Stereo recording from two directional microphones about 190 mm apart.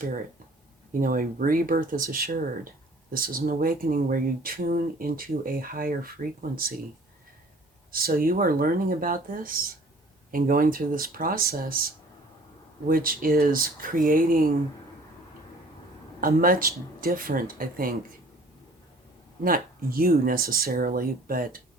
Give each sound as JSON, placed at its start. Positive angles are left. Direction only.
{"t": 0.9, "sound": "speech", "side_deg": -45}
{"t": 7.9, "sound": "speech", "side_deg": -50}
{"t": 16.2, "sound": "speech", "side_deg": -50}
{"t": 19.4, "sound": "speech", "side_deg": -50}